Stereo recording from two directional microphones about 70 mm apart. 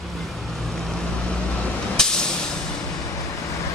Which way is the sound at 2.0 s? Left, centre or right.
Centre.